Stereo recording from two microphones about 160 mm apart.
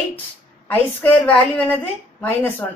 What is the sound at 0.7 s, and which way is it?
Speech, 10° left (ahead or behind).